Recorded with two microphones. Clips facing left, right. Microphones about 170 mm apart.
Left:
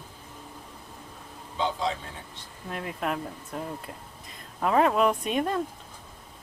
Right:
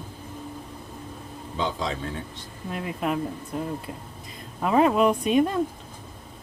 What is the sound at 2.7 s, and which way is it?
Speech, 5° right (ahead or behind).